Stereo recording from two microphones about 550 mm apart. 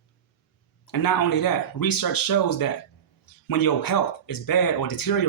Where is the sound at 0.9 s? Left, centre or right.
Left.